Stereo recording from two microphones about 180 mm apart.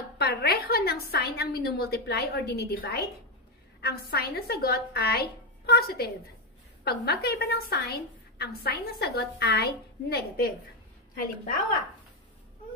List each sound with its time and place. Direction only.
0.2 s a woman's voice: 60° left (ahead or behind)